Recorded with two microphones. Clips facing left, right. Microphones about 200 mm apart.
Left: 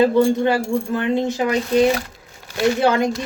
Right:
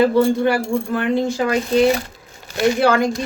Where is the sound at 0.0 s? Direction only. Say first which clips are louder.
Even; 20° left (ahead or behind).